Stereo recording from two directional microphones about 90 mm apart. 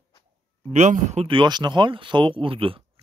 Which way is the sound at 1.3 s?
60° right (ahead or behind).